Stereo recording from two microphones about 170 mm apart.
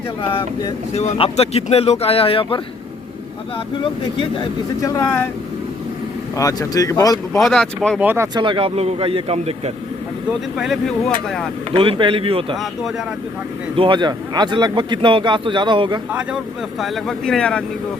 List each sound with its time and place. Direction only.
0.2 s speech: 30° left (ahead or behind)
4.2 s speech: 25° left (ahead or behind)
6.3 s speech: 20° left (ahead or behind)
7.3 s speech: centre (ahead or behind)
7.9 s speech: 10° right (ahead or behind)
8.4 s a man's voice: 30° right (ahead or behind)
10.6 s speech: centre (ahead or behind)
11.7 s a man's voice: 30° right (ahead or behind)
13.7 s speech: 30° right (ahead or behind)
16.8 s speech: centre (ahead or behind)